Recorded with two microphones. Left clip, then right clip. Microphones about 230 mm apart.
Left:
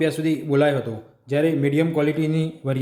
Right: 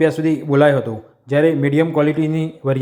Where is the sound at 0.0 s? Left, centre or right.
Centre.